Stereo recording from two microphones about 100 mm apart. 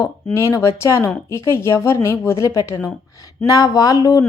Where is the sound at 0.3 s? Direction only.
30° left (ahead or behind).